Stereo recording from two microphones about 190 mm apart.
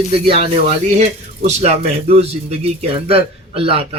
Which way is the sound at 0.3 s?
35° right (ahead or behind).